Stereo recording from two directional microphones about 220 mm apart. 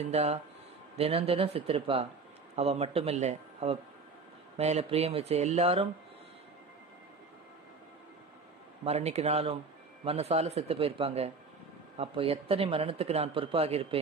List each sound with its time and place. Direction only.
0.0 s speech: 30° right (ahead or behind)
8.8 s speech: 30° right (ahead or behind)